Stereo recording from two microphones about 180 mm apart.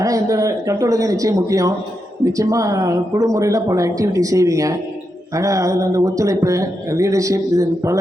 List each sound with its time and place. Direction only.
0.0 s speech: 20° right (ahead or behind)